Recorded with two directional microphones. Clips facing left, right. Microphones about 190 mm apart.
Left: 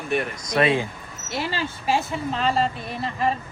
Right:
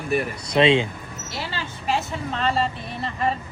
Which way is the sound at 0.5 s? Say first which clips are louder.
Right 3 dB; 25° right (ahead or behind).